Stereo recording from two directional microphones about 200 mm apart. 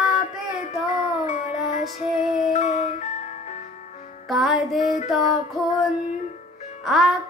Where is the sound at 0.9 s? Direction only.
40° left (ahead or behind).